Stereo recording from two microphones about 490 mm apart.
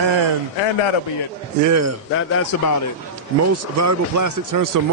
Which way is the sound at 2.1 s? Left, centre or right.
Left.